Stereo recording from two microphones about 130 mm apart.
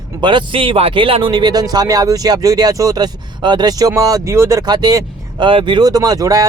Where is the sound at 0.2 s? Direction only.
35° right (ahead or behind).